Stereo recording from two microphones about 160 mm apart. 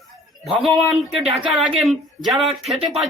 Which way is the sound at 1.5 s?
Centre (ahead or behind).